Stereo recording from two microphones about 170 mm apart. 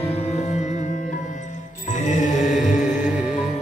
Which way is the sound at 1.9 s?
45° left (ahead or behind).